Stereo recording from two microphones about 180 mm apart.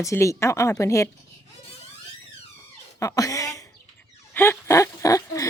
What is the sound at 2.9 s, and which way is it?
Speech, 20° left (ahead or behind).